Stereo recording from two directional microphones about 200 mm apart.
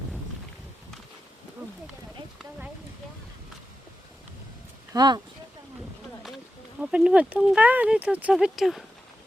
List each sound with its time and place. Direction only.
4.9 s speech: 20° right (ahead or behind)
6.7 s speech: 5° right (ahead or behind)